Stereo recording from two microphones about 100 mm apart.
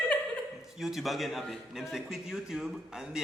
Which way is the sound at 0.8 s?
Centre (ahead or behind).